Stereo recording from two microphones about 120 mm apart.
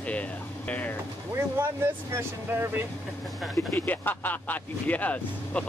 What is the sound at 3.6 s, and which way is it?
Music, 20° left (ahead or behind).